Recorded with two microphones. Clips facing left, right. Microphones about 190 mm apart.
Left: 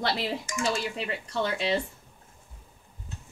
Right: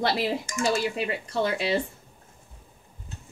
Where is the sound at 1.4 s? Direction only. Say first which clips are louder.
Right 2 dB; 10° right (ahead or behind).